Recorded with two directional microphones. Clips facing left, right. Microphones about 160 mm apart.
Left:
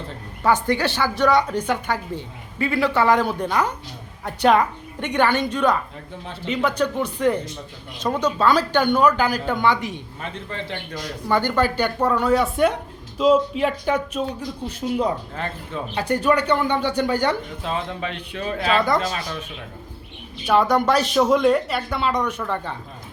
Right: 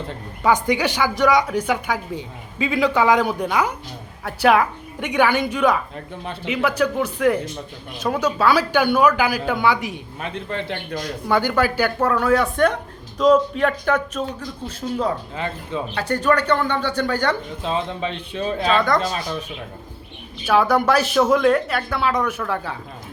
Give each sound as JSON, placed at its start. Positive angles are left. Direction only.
{"t": 0.4, "sound": "a woman's voice", "side_deg": -15}
{"t": 10.2, "sound": "a man's voice", "side_deg": -60}
{"t": 11.3, "sound": "a woman's voice", "side_deg": -10}
{"t": 17.6, "sound": "a man's voice", "side_deg": -20}
{"t": 18.7, "sound": "a woman's voice", "side_deg": 5}
{"t": 20.4, "sound": "a woman's voice", "side_deg": -5}